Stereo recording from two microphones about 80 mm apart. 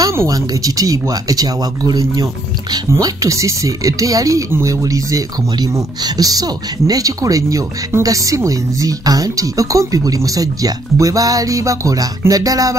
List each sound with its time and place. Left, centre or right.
0.3 s speech: right
2.9 s speech: right
4.5 s speech: right
4.8 s speech: right